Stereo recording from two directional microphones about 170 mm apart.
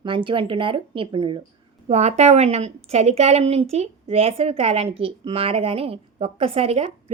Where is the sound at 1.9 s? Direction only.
40° right (ahead or behind).